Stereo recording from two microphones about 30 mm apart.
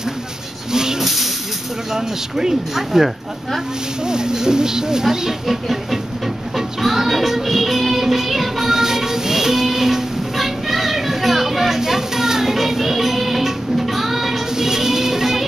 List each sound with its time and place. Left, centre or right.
1.0 s hiss: centre
2.0 s speech: centre
4.0 s speech: right
5.5 s a sound: centre
6.5 s music: centre
8.7 s music: centre